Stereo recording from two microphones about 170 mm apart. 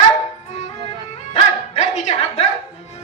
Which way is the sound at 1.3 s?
40° left (ahead or behind).